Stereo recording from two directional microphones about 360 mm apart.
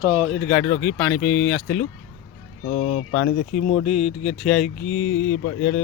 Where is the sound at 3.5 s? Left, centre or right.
Centre.